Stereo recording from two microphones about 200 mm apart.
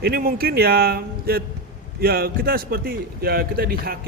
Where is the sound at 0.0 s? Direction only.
50° right (ahead or behind).